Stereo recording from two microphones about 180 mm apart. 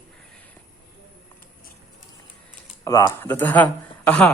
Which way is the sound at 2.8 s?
20° left (ahead or behind).